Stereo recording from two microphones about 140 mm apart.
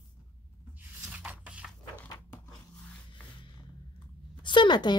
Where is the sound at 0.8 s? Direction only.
10° right (ahead or behind).